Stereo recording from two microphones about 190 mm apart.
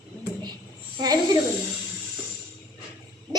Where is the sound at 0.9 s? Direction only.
20° right (ahead or behind).